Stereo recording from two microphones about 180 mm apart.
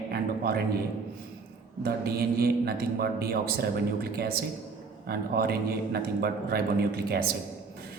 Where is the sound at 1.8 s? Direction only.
60° right (ahead or behind).